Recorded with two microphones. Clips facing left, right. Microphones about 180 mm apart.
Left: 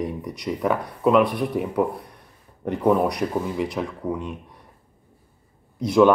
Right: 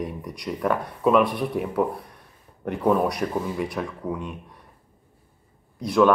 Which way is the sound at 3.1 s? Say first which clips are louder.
Left 2 dB; 15° left (ahead or behind).